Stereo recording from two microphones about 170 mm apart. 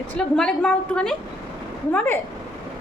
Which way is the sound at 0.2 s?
5° left (ahead or behind).